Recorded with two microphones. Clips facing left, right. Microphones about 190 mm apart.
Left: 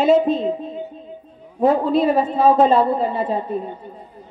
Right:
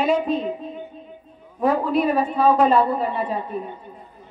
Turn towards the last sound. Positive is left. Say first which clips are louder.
# left 3 dB
turn(degrees=25)  # may be behind; listen again after turning